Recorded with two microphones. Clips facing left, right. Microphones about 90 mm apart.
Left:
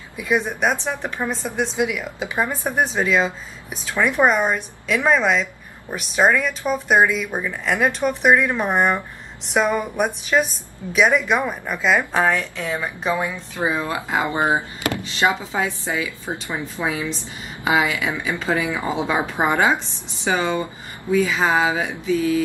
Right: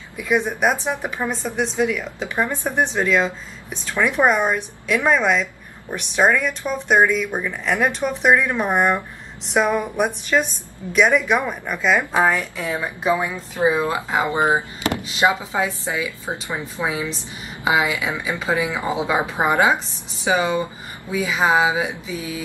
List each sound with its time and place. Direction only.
0.8 s a woman's voice: 10° right (ahead or behind)
1.8 s a woman's voice: 10° left (ahead or behind); by 13.3 s 5° right (ahead or behind)
13.6 s speech: 20° right (ahead or behind)